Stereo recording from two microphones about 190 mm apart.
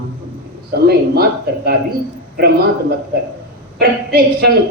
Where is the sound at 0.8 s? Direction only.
55° right (ahead or behind).